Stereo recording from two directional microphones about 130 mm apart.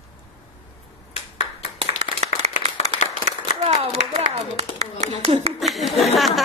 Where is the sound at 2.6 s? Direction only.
45° right (ahead or behind).